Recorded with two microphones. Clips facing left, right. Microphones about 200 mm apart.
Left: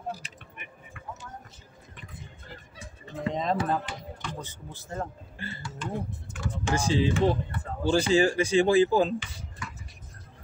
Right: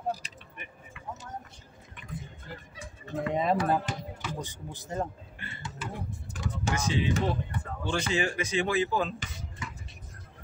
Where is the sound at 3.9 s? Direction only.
45° right (ahead or behind).